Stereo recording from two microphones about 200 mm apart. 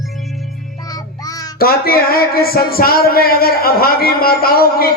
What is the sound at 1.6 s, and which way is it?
Speech, 50° left (ahead or behind).